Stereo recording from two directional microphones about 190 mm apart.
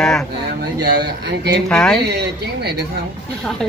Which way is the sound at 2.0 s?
60° right (ahead or behind).